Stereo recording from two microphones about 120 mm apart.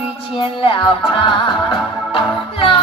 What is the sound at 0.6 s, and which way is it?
Music, 45° left (ahead or behind).